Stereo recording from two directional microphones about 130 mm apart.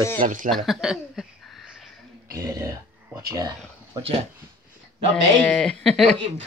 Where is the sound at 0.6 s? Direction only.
Centre (ahead or behind).